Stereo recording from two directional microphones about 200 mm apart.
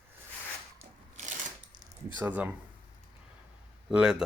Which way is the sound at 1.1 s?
35° right (ahead or behind).